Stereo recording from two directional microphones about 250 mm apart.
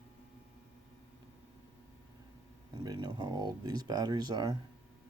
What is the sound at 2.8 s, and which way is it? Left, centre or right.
Speech, centre.